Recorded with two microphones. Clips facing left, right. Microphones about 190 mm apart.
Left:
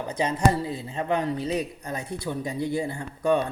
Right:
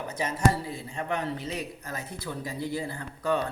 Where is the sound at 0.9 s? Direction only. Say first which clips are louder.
Left 5 dB; 20° left (ahead or behind).